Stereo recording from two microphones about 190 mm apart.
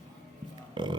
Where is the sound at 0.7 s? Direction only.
25° right (ahead or behind).